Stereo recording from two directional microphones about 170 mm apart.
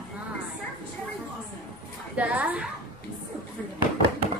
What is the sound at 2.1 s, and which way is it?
Speech, 10° right (ahead or behind).